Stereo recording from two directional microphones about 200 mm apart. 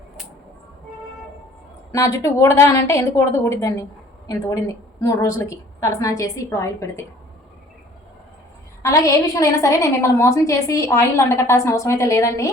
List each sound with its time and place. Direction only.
1.9 s a woman's voice: 15° left (ahead or behind)
8.8 s a woman's voice: 15° left (ahead or behind)